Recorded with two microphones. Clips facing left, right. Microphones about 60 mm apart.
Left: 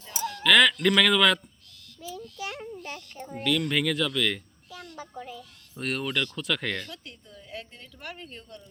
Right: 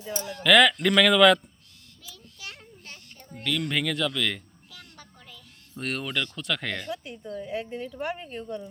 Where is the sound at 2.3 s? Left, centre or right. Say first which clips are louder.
Left 5 dB; left.